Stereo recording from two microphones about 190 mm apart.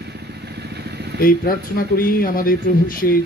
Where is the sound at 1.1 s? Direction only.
50° left (ahead or behind).